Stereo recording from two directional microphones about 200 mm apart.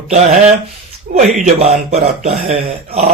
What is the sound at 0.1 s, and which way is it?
Speech, 35° right (ahead or behind).